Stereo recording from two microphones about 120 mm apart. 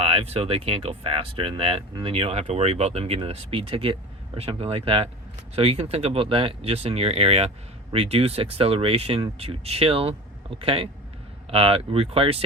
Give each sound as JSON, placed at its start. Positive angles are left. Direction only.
{"t": 0.0, "sound": "speech", "side_deg": -55}